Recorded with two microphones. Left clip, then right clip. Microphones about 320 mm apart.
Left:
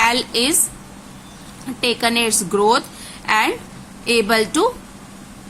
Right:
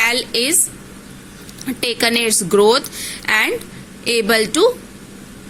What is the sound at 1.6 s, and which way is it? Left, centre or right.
A woman's voice, centre.